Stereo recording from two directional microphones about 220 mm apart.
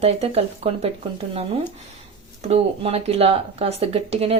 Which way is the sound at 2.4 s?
25° right (ahead or behind).